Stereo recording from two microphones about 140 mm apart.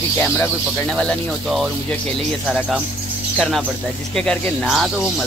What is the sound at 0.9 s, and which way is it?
Speech, 5° left (ahead or behind).